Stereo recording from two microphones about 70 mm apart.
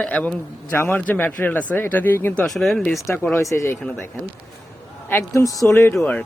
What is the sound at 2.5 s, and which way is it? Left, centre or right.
Speech, centre.